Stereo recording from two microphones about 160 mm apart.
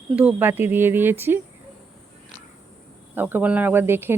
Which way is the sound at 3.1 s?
10° right (ahead or behind).